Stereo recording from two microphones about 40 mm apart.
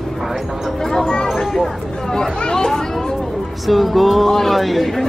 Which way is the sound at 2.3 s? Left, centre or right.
Left.